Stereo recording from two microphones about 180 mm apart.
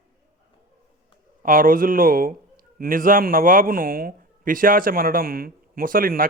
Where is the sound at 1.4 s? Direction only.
50° right (ahead or behind).